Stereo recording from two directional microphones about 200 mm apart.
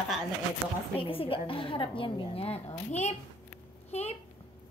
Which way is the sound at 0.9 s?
25° left (ahead or behind).